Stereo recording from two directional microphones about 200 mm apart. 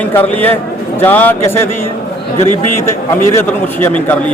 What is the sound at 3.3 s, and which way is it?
Speech, 10° left (ahead or behind).